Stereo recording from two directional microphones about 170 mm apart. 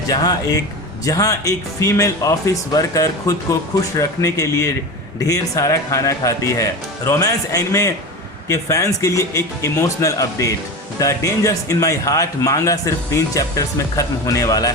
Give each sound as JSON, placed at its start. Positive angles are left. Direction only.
{"t": 0.1, "sound": "speech", "side_deg": 25}